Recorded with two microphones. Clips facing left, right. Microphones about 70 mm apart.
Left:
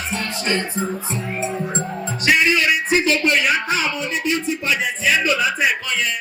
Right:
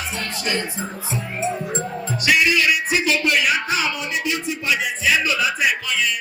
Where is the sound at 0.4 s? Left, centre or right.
Left.